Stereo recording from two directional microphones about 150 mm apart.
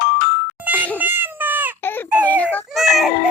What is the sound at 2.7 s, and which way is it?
Baby cry, centre (ahead or behind).